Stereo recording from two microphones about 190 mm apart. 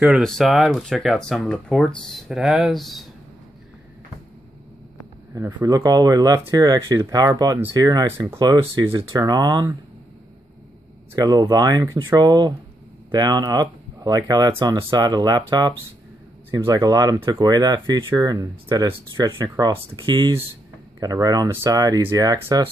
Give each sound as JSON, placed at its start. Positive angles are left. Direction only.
{"t": 0.0, "sound": "speech", "side_deg": 0}
{"t": 5.3, "sound": "speech", "side_deg": -20}
{"t": 11.1, "sound": "speech", "side_deg": -20}